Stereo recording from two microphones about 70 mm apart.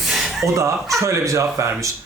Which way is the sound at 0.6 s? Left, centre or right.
Right.